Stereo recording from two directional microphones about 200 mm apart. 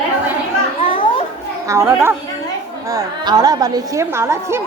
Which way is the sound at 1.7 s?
15° right (ahead or behind).